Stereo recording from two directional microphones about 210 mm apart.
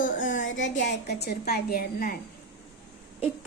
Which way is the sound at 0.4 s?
60° left (ahead or behind).